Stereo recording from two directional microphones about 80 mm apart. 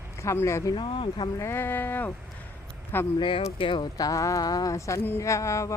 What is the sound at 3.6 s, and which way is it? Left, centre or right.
Speech, left.